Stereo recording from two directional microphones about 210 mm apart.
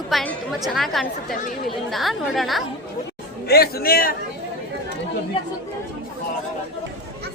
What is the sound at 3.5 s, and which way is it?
Speech, 45° left (ahead or behind).